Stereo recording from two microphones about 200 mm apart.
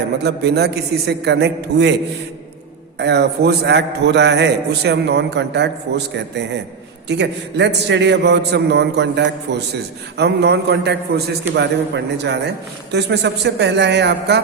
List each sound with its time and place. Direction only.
0.2 s a man's voice: 55° right (ahead or behind)
3.0 s a man's voice: 55° right (ahead or behind)